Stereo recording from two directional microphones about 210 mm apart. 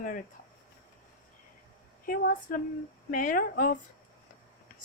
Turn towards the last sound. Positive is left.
turn(degrees=40)  # may be behind; listen again after turning